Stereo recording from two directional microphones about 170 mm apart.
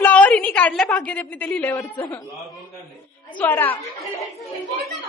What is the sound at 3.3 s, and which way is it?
Speech, 10° left (ahead or behind).